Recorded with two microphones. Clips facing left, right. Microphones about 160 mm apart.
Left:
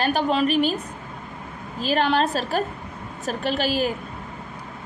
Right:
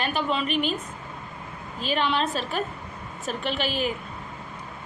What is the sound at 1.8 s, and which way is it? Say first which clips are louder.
A woman's voice: left 4 dB; 40° left (ahead or behind).